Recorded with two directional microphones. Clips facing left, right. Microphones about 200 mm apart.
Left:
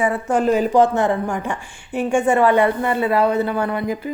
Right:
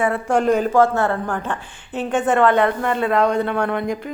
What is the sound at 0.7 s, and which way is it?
A woman's voice, 15° left (ahead or behind).